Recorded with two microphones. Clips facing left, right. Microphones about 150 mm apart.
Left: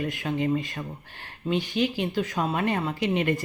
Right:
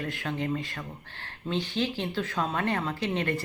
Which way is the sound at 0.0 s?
15° left (ahead or behind).